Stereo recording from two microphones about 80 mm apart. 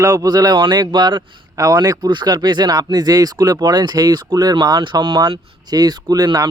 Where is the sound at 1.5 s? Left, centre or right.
Right.